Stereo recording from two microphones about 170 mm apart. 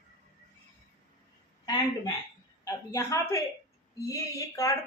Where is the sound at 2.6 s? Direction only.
20° left (ahead or behind).